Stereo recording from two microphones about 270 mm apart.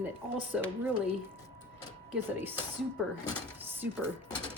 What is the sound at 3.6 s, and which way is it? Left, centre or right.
Music, centre.